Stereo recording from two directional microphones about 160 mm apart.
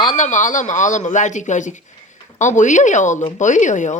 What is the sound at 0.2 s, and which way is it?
Speech, 50° left (ahead or behind).